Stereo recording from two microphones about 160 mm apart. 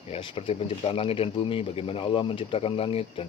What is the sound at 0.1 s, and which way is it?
Speech, 35° left (ahead or behind).